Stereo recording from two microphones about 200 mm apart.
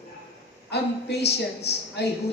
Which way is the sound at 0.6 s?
55° left (ahead or behind).